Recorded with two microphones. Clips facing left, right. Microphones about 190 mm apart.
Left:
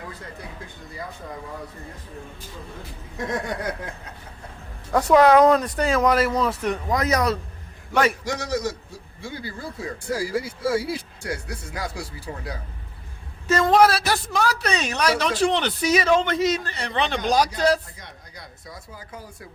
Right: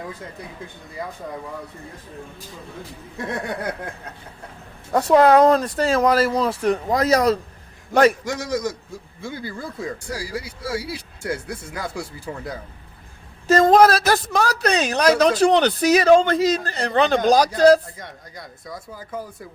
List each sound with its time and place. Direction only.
3.2 s a sound: 60° right (ahead or behind)
4.9 s a woman's voice: 25° right (ahead or behind)
7.9 s speech: 45° right (ahead or behind)
10.0 s speech: 50° left (ahead or behind)
11.2 s speech: 50° right (ahead or behind)
13.5 s a woman's voice: 40° right (ahead or behind)